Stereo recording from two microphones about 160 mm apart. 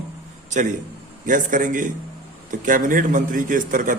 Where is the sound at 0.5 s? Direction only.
50° right (ahead or behind).